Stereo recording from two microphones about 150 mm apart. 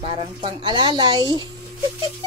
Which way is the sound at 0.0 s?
35° right (ahead or behind).